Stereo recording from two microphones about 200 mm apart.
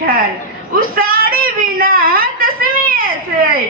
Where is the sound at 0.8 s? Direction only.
45° right (ahead or behind).